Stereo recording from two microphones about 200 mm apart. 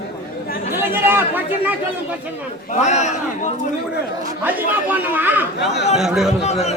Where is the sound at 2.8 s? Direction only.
35° left (ahead or behind).